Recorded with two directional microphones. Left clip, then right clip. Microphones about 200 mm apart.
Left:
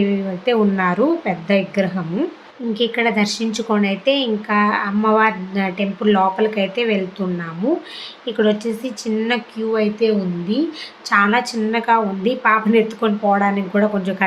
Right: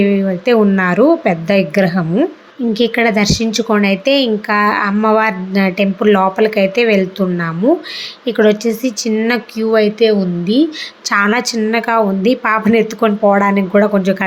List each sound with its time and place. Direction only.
0.0 s speech: 20° right (ahead or behind)